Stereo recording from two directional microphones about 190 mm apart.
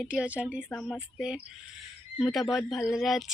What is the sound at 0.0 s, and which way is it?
Speech, 5° right (ahead or behind).